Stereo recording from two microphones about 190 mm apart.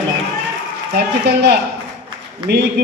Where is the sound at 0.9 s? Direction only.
60° right (ahead or behind).